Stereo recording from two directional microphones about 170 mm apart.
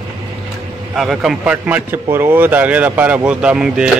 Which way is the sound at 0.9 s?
Centre (ahead or behind).